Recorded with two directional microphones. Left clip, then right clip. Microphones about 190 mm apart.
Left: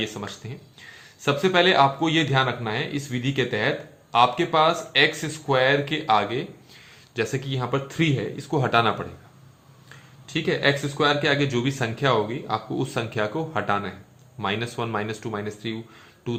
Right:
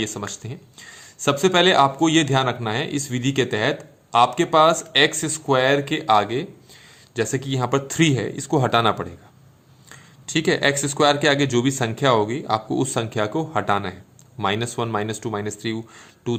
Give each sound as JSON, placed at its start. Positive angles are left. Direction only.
{"t": 0.0, "sound": "speech", "side_deg": -45}